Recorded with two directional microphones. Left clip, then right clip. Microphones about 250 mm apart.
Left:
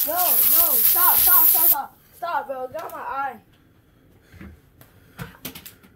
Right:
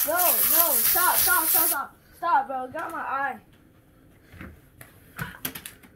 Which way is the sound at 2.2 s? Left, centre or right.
Left.